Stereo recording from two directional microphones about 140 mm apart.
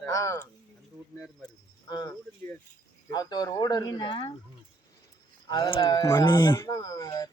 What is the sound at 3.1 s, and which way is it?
Speech, 30° left (ahead or behind).